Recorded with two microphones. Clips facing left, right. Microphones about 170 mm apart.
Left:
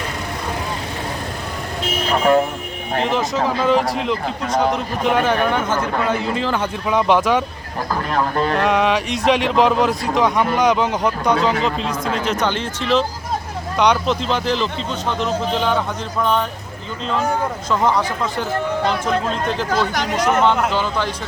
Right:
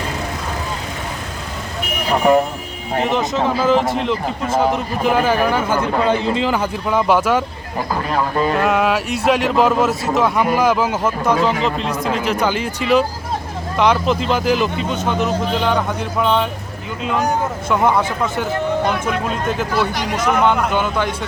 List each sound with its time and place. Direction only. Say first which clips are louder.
2.0 s speech: right 2 dB; 15° right (ahead or behind)
2.9 s speech: right 1 dB; 5° right (ahead or behind)
6.0 s a man's voice: right 3 dB; 25° right (ahead or behind)
6.4 s speech: right 2 dB; 10° right (ahead or behind)
17.2 s speech: right 1 dB; 5° right (ahead or behind)